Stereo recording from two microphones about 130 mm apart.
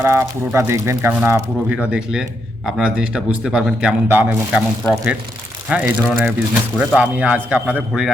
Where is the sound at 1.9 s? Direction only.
5° right (ahead or behind).